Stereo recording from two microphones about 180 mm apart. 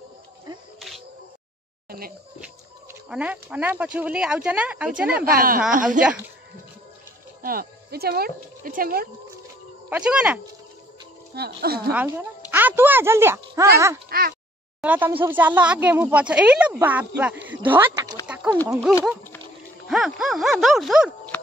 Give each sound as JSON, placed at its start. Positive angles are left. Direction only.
{"t": 0.7, "sound": "a sound", "side_deg": 0}
{"t": 1.9, "sound": "a sound", "side_deg": -55}
{"t": 2.4, "sound": "speech", "side_deg": -5}
{"t": 5.1, "sound": "a woman's voice", "side_deg": -55}
{"t": 7.4, "sound": "speech", "side_deg": -55}
{"t": 9.8, "sound": "speech", "side_deg": -5}
{"t": 11.3, "sound": "speech", "side_deg": -60}
{"t": 11.9, "sound": "speech", "side_deg": -10}
{"t": 14.0, "sound": "speech", "side_deg": -55}
{"t": 14.8, "sound": "speech", "side_deg": -10}
{"t": 18.2, "sound": "a sound", "side_deg": -5}
{"t": 18.7, "sound": "speech", "side_deg": 0}